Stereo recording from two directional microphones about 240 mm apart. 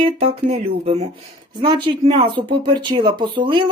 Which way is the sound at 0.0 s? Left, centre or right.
Right.